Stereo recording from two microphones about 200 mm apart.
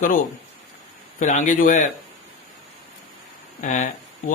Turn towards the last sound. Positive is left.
turn(degrees=40)  # may be behind; listen again after turning